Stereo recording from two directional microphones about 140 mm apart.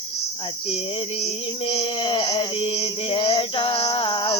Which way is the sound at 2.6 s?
40° left (ahead or behind).